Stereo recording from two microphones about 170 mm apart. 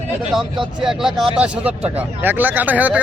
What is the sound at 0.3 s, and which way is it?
Speech, centre (ahead or behind).